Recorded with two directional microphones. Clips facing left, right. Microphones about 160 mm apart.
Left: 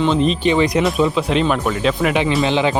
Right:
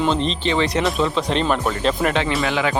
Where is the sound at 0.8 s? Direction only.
Centre (ahead or behind).